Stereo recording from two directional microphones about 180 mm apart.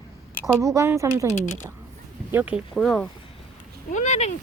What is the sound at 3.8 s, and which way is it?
Speech, 40° left (ahead or behind).